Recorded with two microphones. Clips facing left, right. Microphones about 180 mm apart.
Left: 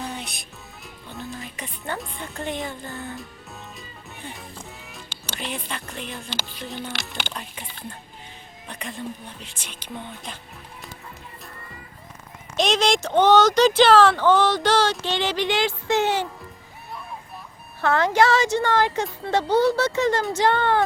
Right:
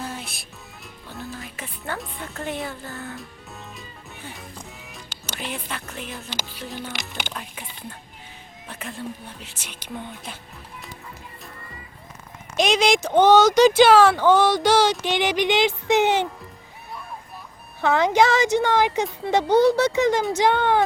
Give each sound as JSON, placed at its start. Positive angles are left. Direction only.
{"t": 0.0, "sound": "music", "side_deg": 0}
{"t": 2.0, "sound": "speech", "side_deg": -5}
{"t": 2.8, "sound": "speech", "side_deg": 15}
{"t": 5.3, "sound": "speech", "side_deg": -10}
{"t": 8.6, "sound": "speech", "side_deg": -5}
{"t": 12.5, "sound": "speech", "side_deg": 0}
{"t": 17.7, "sound": "speech", "side_deg": -15}